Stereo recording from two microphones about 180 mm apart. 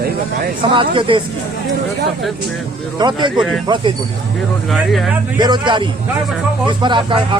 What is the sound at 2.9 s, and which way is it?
Speech, 25° right (ahead or behind).